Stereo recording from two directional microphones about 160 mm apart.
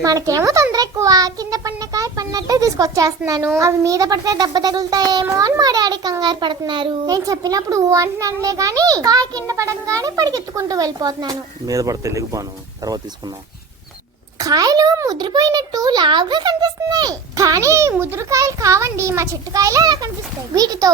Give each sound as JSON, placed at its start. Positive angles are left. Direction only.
{"t": 0.0, "sound": "a child's voice", "side_deg": -20}
{"t": 14.3, "sound": "a child's voice", "side_deg": -20}